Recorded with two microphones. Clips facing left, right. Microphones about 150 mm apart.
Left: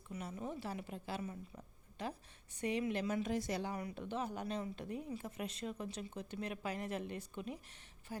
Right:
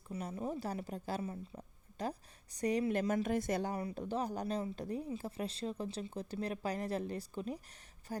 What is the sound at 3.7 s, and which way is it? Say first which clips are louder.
A woman's voice: right 4 dB; 35° right (ahead or behind).